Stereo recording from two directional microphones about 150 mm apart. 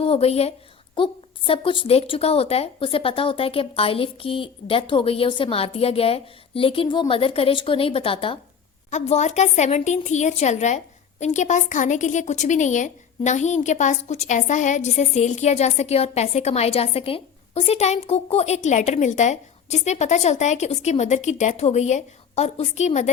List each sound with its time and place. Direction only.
0.0 s a woman's voice: 40° left (ahead or behind)
8.9 s a woman's voice: 50° left (ahead or behind)